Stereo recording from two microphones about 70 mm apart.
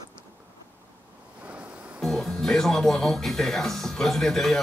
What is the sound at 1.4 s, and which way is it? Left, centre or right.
Music, centre.